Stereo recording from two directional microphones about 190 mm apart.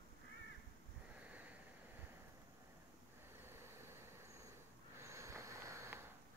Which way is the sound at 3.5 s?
15° right (ahead or behind).